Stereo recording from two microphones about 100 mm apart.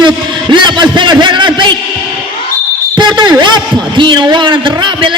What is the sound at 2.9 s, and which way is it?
A man's voice, 50° right (ahead or behind).